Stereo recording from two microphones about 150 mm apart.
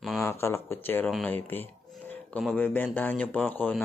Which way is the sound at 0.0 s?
Centre (ahead or behind).